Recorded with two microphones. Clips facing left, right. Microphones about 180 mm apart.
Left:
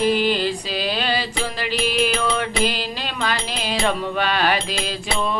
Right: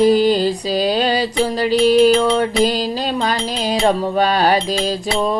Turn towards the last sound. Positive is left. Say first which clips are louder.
# right 6 dB
turn(degrees=-40)  # may be behind; listen again after turning